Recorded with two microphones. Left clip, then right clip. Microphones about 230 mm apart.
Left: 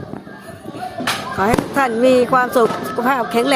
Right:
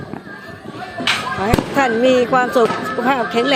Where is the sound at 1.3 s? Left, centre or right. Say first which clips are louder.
Left 1 dB; centre.